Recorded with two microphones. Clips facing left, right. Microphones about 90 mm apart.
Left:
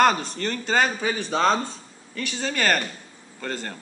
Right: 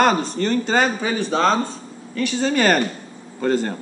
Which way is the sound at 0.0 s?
5° right (ahead or behind).